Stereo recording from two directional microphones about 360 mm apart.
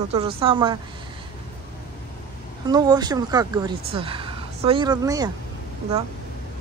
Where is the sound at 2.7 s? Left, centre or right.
Centre.